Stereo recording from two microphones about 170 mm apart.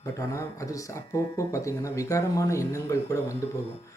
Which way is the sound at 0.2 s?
20° left (ahead or behind).